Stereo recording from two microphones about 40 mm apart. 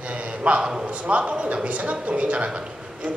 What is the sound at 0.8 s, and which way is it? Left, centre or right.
A man's voice, right.